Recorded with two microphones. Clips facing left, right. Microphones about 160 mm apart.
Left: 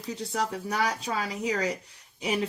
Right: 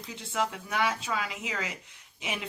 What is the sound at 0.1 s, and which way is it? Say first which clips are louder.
Speech: left 2 dB; 40° left (ahead or behind).